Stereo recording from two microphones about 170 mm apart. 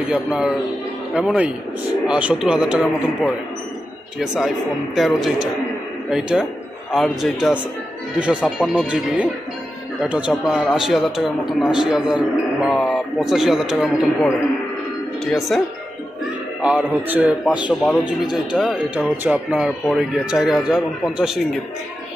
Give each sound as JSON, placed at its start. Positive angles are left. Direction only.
{"t": 0.1, "sound": "speech", "side_deg": -5}
{"t": 10.0, "sound": "speech", "side_deg": -5}
{"t": 16.6, "sound": "speech", "side_deg": -5}
{"t": 18.6, "sound": "speech", "side_deg": -5}